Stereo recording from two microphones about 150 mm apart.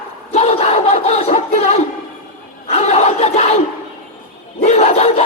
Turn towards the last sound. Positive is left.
turn(degrees=45)  # may be behind; listen again after turning